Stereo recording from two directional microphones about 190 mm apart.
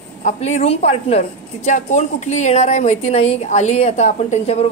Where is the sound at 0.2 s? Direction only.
40° left (ahead or behind).